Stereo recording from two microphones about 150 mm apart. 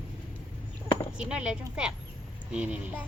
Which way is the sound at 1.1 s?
5° right (ahead or behind).